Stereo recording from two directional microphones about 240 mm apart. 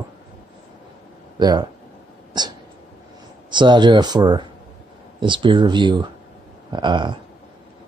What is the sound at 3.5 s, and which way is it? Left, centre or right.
Speech, centre.